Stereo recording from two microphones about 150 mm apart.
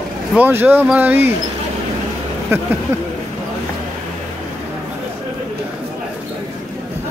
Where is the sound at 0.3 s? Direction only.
10° right (ahead or behind).